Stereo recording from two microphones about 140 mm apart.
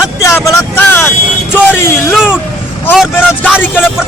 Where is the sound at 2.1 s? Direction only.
5° right (ahead or behind).